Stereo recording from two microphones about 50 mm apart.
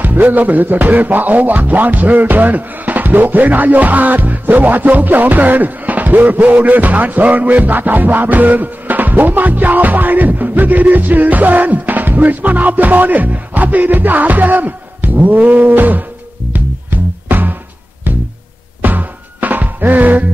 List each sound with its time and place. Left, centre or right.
0.0 s speech: right
16.5 s music: right
18.8 s music: right